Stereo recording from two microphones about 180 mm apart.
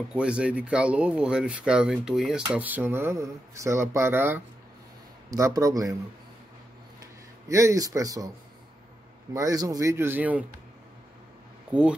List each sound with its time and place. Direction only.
0.1 s speech: 5° right (ahead or behind)
7.0 s a sound: 15° right (ahead or behind)
9.3 s speech: 20° right (ahead or behind)